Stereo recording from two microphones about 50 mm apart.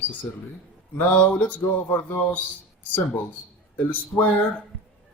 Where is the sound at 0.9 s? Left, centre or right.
Left.